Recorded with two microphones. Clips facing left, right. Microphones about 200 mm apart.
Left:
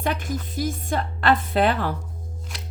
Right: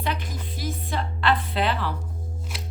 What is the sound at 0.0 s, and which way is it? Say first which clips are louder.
Speech: left 4 dB; 45° left (ahead or behind).